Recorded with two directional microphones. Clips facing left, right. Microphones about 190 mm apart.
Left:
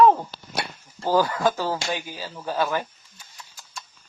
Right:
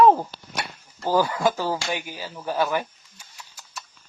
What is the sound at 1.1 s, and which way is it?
A man's voice, 15° right (ahead or behind).